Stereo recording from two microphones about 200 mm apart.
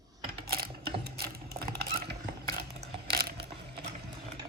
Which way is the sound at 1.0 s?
55° right (ahead or behind).